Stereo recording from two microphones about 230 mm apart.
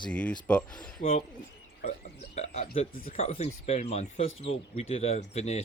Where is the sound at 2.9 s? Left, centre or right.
Left.